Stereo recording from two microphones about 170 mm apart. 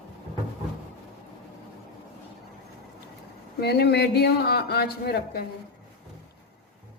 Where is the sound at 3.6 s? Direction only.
70° left (ahead or behind).